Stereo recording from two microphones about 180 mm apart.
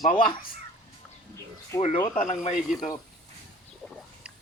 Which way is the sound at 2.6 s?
Centre (ahead or behind).